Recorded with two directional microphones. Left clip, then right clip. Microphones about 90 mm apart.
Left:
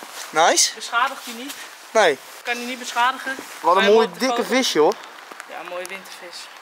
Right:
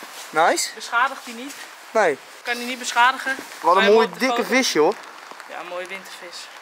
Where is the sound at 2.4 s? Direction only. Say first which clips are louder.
Even; centre (ahead or behind).